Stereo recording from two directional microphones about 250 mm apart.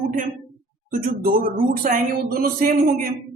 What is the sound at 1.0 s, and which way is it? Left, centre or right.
A man's voice, right.